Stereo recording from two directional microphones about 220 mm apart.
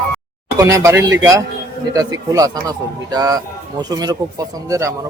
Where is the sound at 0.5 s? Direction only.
15° right (ahead or behind).